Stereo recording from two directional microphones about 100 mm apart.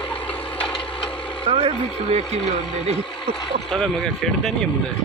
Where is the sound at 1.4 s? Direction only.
70° right (ahead or behind).